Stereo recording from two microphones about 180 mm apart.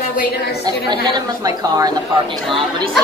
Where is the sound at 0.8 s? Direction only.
20° right (ahead or behind).